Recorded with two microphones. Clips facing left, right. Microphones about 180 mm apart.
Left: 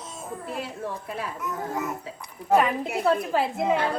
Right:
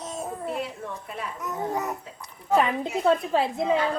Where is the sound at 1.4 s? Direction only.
40° right (ahead or behind).